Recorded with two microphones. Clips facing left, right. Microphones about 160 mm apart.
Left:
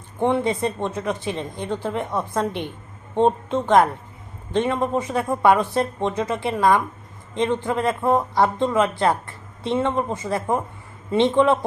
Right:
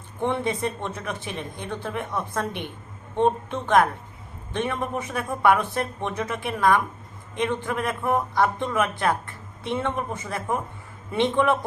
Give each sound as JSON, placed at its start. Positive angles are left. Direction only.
{"t": 0.2, "sound": "speech", "side_deg": 15}